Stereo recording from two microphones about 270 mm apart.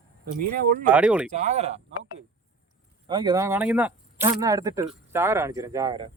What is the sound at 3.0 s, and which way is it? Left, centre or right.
Speech, centre.